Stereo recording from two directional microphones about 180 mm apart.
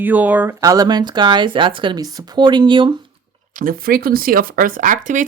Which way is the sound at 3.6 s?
50° right (ahead or behind).